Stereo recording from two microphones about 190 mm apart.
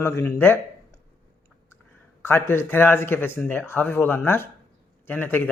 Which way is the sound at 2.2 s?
10° left (ahead or behind).